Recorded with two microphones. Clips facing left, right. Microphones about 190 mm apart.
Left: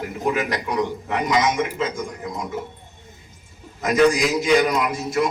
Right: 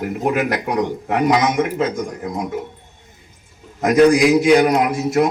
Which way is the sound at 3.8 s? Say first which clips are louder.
Right 5 dB; 55° right (ahead or behind).